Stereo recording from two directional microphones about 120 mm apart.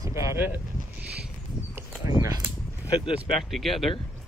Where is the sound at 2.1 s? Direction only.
25° right (ahead or behind).